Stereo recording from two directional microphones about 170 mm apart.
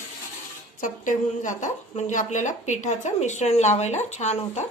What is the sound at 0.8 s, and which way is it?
A woman's voice, 50° left (ahead or behind).